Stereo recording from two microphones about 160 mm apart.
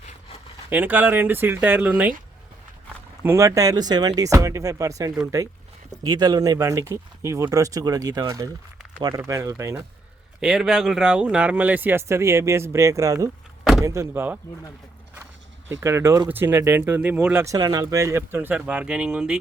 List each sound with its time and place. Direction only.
0.7 s speech: 10° right (ahead or behind)
3.2 s speech: 20° right (ahead or behind)
10.4 s speech: 5° right (ahead or behind)
15.7 s speech: 15° right (ahead or behind)